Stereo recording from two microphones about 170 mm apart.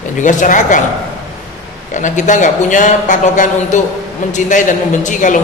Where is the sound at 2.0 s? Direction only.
45° left (ahead or behind).